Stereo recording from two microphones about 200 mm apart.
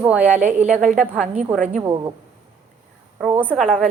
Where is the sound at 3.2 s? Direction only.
5° right (ahead or behind).